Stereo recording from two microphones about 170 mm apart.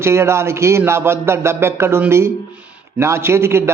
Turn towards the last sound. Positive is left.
turn(degrees=-15)  # may be behind; listen again after turning